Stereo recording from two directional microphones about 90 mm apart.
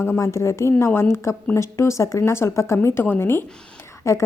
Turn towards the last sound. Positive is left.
turn(degrees=35)  # may be behind; listen again after turning